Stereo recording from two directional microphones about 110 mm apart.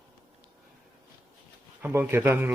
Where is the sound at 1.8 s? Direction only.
20° right (ahead or behind).